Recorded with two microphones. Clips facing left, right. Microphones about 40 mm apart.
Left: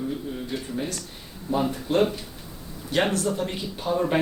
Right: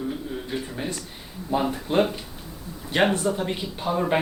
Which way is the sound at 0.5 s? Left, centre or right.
Centre.